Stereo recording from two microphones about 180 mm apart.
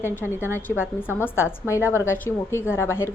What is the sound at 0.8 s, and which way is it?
A woman's voice, 10° left (ahead or behind).